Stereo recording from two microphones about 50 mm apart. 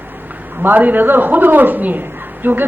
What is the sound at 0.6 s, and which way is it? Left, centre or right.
A man's voice, right.